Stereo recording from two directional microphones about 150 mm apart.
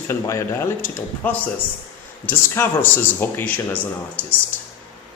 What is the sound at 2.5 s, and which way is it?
Speech, 15° left (ahead or behind).